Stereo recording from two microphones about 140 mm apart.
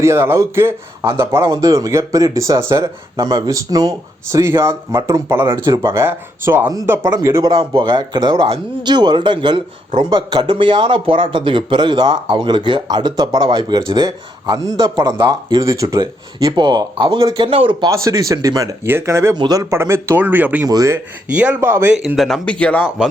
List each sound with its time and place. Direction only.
0.0 s a man's voice: 20° right (ahead or behind); by 17.9 s 35° right (ahead or behind)
17.9 s speech: 20° right (ahead or behind)
19.7 s speech: 20° right (ahead or behind)
20.7 s speech: 25° right (ahead or behind)
21.3 s speech: 10° right (ahead or behind)
21.9 s speech: centre (ahead or behind)